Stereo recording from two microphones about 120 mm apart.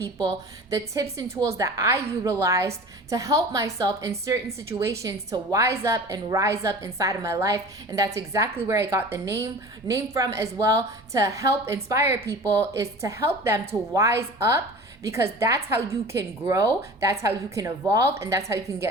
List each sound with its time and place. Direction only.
1.1 s a woman's voice: 30° right (ahead or behind)